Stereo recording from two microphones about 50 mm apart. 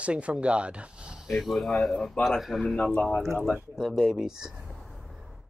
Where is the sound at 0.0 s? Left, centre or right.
Right.